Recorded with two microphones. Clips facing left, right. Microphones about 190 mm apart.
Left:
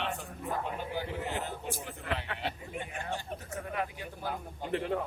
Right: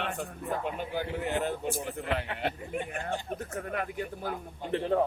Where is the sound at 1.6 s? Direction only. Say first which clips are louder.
Right 5 dB; 55° right (ahead or behind).